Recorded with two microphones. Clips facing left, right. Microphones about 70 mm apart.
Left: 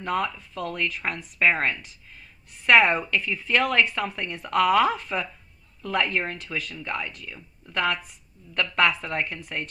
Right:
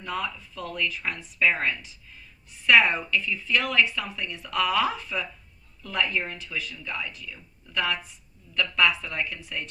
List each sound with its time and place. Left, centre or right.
0.0 s a woman's voice: left